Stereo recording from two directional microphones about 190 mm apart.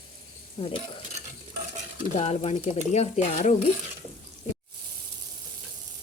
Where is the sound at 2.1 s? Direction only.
35° left (ahead or behind).